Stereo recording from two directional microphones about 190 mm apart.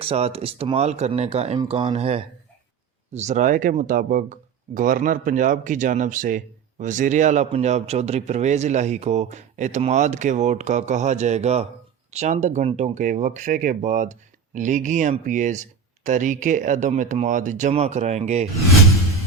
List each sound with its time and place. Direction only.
0.0 s speech: 30° right (ahead or behind)